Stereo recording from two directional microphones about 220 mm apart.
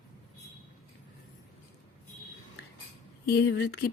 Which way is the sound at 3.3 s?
50° left (ahead or behind).